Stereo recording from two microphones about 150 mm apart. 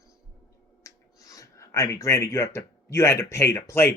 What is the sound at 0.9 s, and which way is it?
Speech, 20° left (ahead or behind).